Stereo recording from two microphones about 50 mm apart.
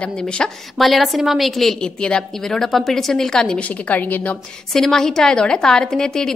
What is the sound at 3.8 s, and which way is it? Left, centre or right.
Speech, left.